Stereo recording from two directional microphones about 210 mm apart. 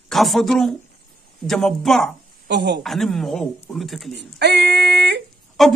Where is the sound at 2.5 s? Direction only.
55° right (ahead or behind).